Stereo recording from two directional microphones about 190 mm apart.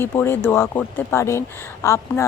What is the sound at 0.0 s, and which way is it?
Speech, 10° left (ahead or behind).